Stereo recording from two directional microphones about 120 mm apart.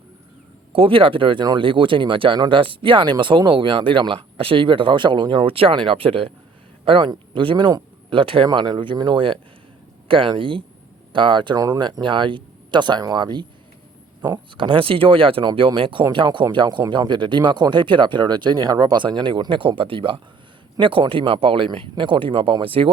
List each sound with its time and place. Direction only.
0.7 s speech: 50° right (ahead or behind)
14.5 s speech: 45° right (ahead or behind)